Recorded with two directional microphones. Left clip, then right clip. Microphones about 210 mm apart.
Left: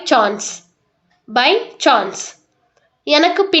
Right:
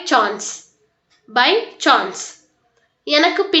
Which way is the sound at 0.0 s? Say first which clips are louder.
Left 2 dB; 45° left (ahead or behind).